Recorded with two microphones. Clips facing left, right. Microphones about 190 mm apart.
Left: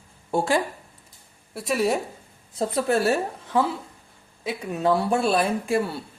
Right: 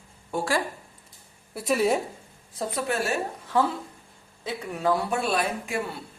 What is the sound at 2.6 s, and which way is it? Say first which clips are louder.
Speech: left 5 dB; 35° left (ahead or behind).